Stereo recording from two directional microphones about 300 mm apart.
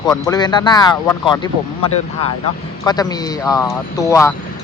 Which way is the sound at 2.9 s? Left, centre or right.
Centre.